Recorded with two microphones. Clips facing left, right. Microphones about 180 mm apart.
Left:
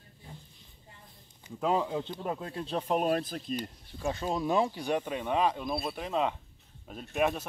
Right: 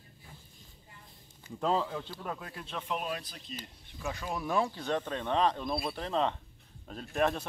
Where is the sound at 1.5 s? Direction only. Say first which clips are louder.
Left 2 dB; 10° left (ahead or behind); by 3.5 s 50° left (ahead or behind).